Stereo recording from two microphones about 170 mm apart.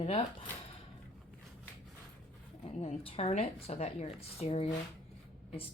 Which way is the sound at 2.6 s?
35° left (ahead or behind).